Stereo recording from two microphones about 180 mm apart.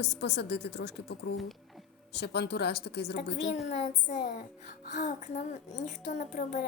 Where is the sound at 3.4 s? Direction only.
40° left (ahead or behind).